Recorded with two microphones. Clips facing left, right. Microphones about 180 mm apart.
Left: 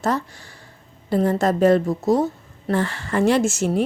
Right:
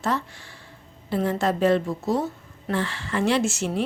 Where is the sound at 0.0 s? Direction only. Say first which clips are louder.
Left 4 dB; 40° left (ahead or behind).